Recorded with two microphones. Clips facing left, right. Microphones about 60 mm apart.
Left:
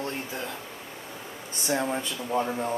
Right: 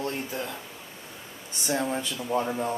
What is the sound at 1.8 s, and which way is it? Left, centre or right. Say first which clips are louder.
Speech: even; centre.